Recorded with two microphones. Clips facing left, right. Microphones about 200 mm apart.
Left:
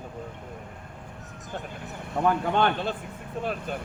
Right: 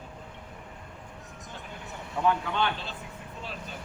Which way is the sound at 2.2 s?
50° left (ahead or behind).